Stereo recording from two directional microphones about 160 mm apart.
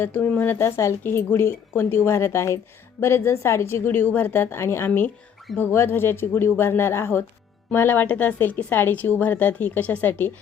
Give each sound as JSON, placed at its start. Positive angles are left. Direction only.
{"t": 0.0, "sound": "a woman's voice", "side_deg": 10}